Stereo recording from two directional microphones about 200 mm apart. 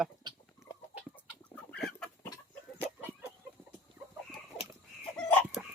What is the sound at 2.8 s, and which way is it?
Chicken, 10° right (ahead or behind).